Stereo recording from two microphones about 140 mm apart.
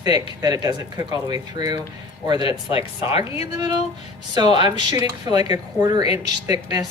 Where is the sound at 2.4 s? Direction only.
40° left (ahead or behind).